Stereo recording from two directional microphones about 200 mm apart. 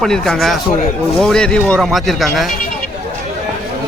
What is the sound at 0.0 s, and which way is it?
Speech, centre (ahead or behind).